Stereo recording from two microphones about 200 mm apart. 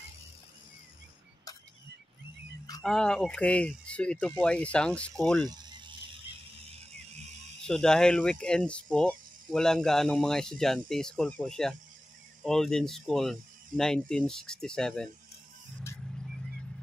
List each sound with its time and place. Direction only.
2.8 s speech: centre (ahead or behind)
5.5 s ratchet: 20° right (ahead or behind)
7.6 s speech: 5° left (ahead or behind)